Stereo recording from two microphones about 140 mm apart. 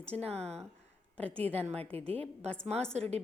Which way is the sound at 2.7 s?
5° left (ahead or behind).